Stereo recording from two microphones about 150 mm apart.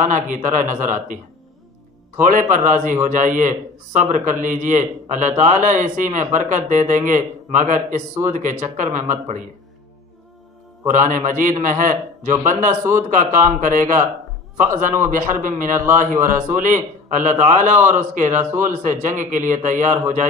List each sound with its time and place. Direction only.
0.0 s a man's voice: 55° right (ahead or behind)
2.5 s a man's voice: 55° right (ahead or behind)
10.9 s a man's voice: 60° right (ahead or behind)